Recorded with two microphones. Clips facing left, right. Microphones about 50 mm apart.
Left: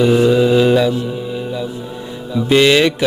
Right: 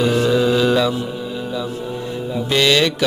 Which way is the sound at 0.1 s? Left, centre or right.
Centre.